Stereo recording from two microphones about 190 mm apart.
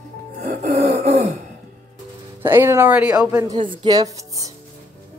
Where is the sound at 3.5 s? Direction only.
25° right (ahead or behind).